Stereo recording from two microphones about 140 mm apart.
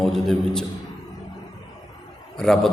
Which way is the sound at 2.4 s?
5° left (ahead or behind).